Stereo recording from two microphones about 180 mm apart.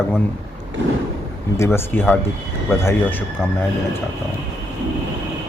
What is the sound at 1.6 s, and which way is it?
Speech, 15° left (ahead or behind).